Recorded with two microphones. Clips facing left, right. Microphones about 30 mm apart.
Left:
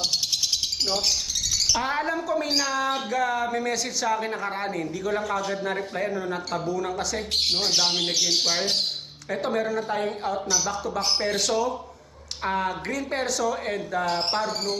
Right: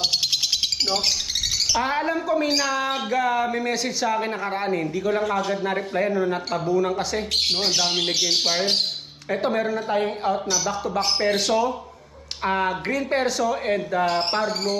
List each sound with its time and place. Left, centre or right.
0.0 s bird: right
1.5 s speech: centre
8.1 s speech: right
9.3 s speech: centre